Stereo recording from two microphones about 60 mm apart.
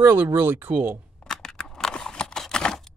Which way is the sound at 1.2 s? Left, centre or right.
Centre.